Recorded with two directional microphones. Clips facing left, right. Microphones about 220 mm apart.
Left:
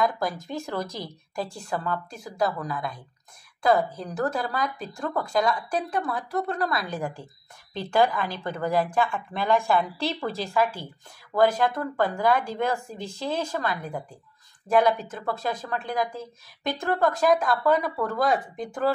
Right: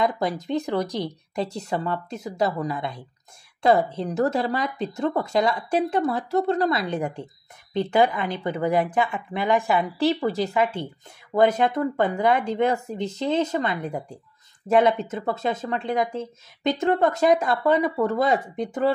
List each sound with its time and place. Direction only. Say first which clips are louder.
0.0 s speech: right 2 dB; 20° right (ahead or behind)